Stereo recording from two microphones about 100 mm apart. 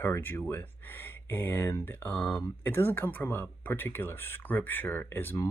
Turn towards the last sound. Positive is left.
turn(degrees=25)  # may be behind; listen again after turning